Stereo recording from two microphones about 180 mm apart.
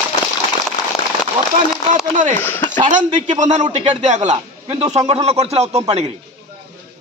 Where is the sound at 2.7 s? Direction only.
45° right (ahead or behind).